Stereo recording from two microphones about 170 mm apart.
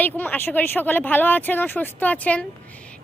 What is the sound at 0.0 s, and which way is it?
Speech, 10° left (ahead or behind).